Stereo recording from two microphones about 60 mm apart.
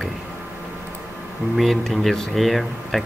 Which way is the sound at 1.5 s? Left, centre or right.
Centre.